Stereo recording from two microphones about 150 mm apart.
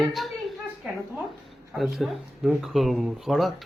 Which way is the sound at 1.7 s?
Centre (ahead or behind).